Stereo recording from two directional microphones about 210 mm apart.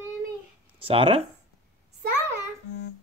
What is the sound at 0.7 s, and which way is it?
Speech, 25° right (ahead or behind).